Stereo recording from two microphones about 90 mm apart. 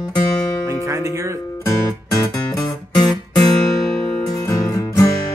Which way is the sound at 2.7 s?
50° left (ahead or behind).